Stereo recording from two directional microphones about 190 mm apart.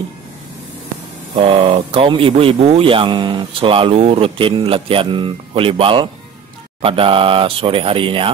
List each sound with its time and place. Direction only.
1.3 s speech: 30° right (ahead or behind)